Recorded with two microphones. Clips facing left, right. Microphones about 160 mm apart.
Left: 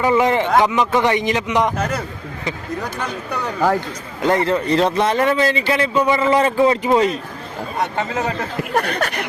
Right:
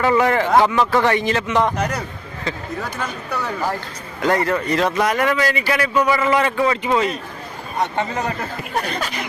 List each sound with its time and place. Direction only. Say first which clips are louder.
0.0 s a man's voice: left 1 dB; 20° left (ahead or behind)
3.8 s a man's voice: left 3 dB; 20° left (ahead or behind)
8.7 s speech: left 4 dB; 60° left (ahead or behind)